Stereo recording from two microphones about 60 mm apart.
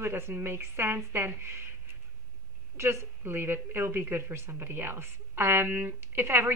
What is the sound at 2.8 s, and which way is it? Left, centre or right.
A woman's voice, right.